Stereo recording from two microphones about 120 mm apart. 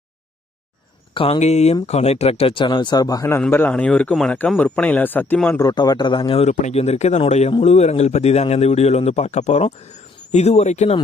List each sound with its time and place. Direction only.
1.1 s speech: 50° left (ahead or behind)
1.4 s speech: 70° left (ahead or behind); by 3.4 s 25° left (ahead or behind)
3.5 s speech: 15° left (ahead or behind)
5.5 s speech: 30° left (ahead or behind)
6.4 s a man's voice: 75° left (ahead or behind)